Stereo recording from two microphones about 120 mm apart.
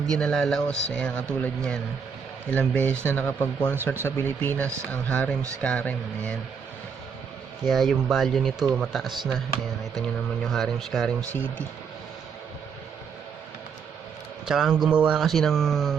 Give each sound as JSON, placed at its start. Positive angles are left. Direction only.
{"t": 0.1, "sound": "speech", "side_deg": 5}
{"t": 7.6, "sound": "speech", "side_deg": 0}
{"t": 14.4, "sound": "speech", "side_deg": -5}